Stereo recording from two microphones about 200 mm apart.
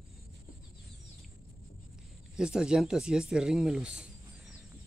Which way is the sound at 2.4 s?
5° right (ahead or behind).